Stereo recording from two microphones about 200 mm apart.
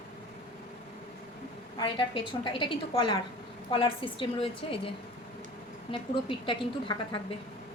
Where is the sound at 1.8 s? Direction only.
25° left (ahead or behind).